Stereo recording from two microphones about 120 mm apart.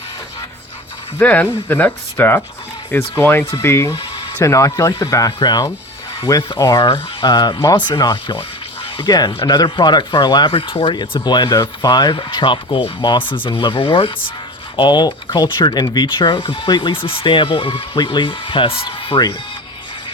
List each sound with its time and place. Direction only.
1.2 s speech: 10° left (ahead or behind); by 10.5 s 40° left (ahead or behind)
10.5 s speech: 50° left (ahead or behind)